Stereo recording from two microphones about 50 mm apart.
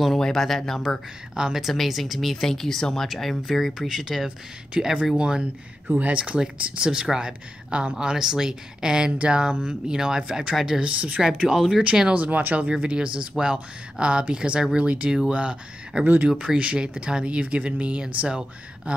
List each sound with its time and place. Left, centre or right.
0.0 s speech: centre
1.3 s speech: centre
3.7 s speech: centre
4.7 s speech: centre
5.9 s speech: right; by 10.8 s centre
10.8 s speech: right
11.2 s speech: centre
11.8 s speech: right